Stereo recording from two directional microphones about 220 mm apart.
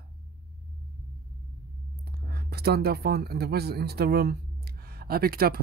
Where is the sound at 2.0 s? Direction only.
45° right (ahead or behind).